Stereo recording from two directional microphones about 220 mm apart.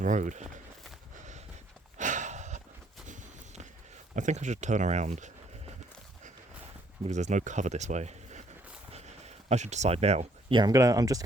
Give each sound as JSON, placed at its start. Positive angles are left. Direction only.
{"t": 0.0, "sound": "speech", "side_deg": -35}
{"t": 1.1, "sound": "a sound", "side_deg": -35}
{"t": 3.1, "sound": "walk", "side_deg": -35}
{"t": 4.1, "sound": "speech", "side_deg": -35}
{"t": 7.0, "sound": "speech", "side_deg": -30}